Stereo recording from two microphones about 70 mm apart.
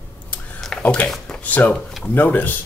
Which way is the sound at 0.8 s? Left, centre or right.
Centre.